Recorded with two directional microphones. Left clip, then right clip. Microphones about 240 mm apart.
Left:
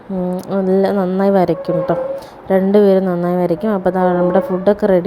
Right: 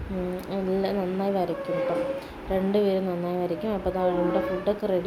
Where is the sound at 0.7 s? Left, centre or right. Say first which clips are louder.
Left 12 dB; left.